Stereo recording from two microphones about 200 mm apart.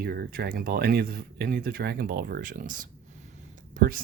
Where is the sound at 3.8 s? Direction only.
45° right (ahead or behind).